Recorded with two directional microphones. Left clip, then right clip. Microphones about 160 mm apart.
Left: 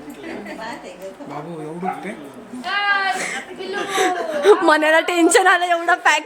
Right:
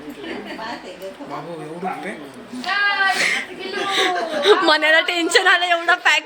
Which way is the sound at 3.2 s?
10° left (ahead or behind).